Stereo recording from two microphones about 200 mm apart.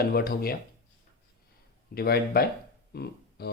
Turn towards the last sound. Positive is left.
turn(degrees=55)  # may be behind; listen again after turning